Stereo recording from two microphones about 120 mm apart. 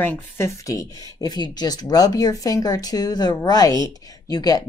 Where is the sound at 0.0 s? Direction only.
25° left (ahead or behind).